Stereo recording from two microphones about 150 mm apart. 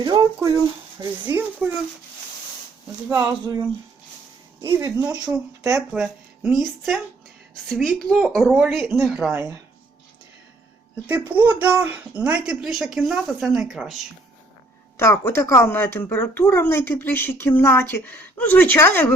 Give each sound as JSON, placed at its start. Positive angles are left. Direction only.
{"t": 0.0, "sound": "a child's voice", "side_deg": -25}
{"t": 3.1, "sound": "speech", "side_deg": -25}
{"t": 4.6, "sound": "a child's voice", "side_deg": -20}
{"t": 5.9, "sound": "speech", "side_deg": -5}
{"t": 9.3, "sound": "speech", "side_deg": -20}
{"t": 11.0, "sound": "speech", "side_deg": -10}
{"t": 14.9, "sound": "speech", "side_deg": 15}